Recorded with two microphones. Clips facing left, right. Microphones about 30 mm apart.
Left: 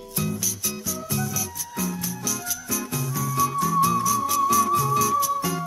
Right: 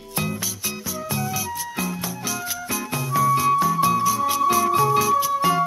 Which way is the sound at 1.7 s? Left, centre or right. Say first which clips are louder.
Right 2 dB; right.